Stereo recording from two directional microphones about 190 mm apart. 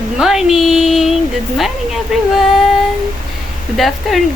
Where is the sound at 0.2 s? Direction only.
5° right (ahead or behind).